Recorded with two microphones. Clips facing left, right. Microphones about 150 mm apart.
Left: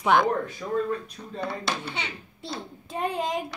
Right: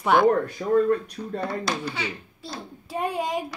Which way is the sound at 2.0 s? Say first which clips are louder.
Right 3 dB; 20° left (ahead or behind).